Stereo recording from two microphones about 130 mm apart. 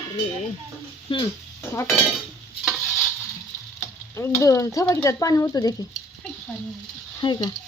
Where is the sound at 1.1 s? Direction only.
40° left (ahead or behind).